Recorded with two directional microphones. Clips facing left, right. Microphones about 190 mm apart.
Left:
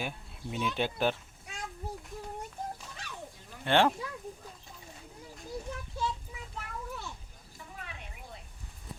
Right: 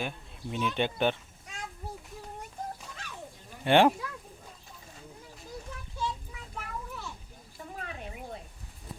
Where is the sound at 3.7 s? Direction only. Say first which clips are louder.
Right 4 dB; 15° right (ahead or behind).